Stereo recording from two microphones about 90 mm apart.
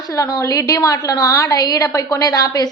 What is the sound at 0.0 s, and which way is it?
A woman's voice, 40° left (ahead or behind).